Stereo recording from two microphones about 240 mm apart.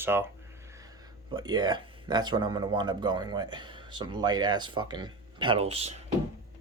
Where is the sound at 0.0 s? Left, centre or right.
Centre.